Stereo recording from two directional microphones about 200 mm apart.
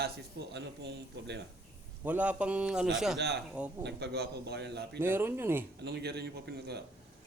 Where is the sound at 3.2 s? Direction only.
55° right (ahead or behind).